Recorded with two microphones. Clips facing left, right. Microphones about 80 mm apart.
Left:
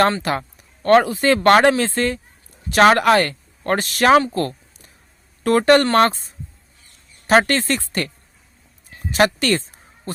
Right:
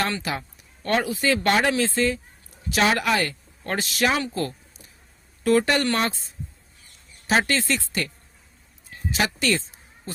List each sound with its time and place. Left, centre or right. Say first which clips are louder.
0.2 s speech: left 7 dB; left
4.3 s a sound: left 5 dB; left
5.4 s speech: left 6 dB; left
7.3 s speech: left 6 dB; left
9.1 s speech: left 7 dB; left